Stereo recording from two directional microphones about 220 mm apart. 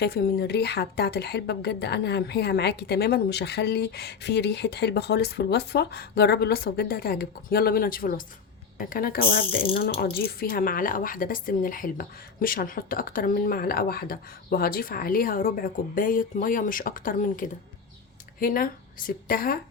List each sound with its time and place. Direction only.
0.0 s speech: 45° left (ahead or behind)